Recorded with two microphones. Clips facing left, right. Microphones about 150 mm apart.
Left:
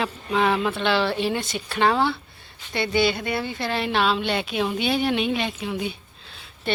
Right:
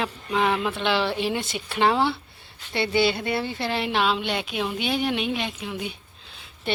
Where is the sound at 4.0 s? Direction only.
5° right (ahead or behind).